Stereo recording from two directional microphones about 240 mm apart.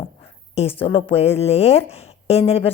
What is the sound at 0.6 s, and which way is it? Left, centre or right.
A woman's voice, left.